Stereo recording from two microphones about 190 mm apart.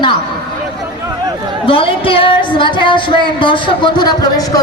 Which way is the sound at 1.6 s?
30° left (ahead or behind).